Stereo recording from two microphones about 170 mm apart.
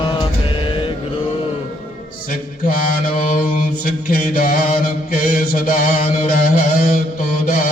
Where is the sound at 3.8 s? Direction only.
55° left (ahead or behind).